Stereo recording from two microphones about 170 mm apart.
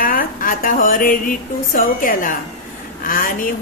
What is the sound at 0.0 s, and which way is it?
A woman's voice, 55° left (ahead or behind).